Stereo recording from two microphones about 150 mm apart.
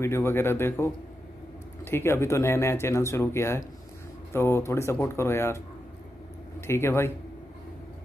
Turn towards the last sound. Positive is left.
turn(degrees=15)  # may be behind; listen again after turning